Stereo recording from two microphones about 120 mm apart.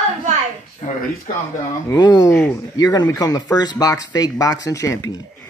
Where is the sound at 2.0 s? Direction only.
35° left (ahead or behind).